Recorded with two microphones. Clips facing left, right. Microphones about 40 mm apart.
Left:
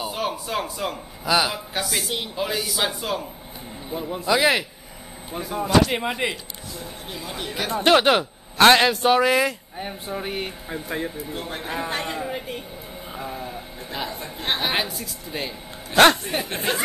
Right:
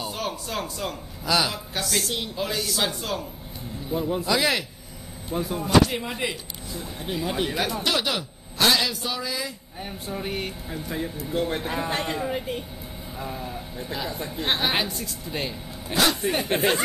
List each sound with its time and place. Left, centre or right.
0.0 s a man's voice: centre
4.3 s speech: centre
5.3 s a man's voice: centre
5.6 s speech: left
7.1 s speech: centre
7.7 s a man's voice: left
9.8 s a man's voice: centre
10.7 s speech: left
11.3 s a woman's voice: centre
15.9 s speech: left
16.2 s speech: centre